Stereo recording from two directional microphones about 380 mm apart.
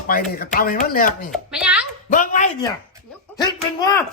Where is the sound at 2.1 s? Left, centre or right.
Centre.